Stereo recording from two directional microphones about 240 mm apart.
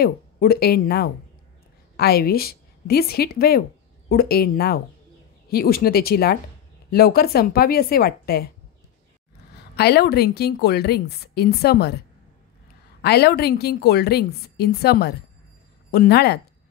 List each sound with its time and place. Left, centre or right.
0.0 s a woman's voice: left
9.8 s a woman's voice: left
13.0 s a woman's voice: left